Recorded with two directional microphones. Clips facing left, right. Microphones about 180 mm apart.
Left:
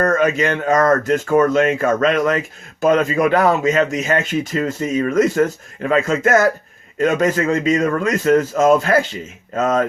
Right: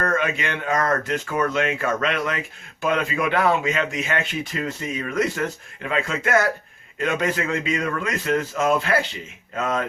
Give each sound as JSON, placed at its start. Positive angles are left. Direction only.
{"t": 0.0, "sound": "a man's voice", "side_deg": 40}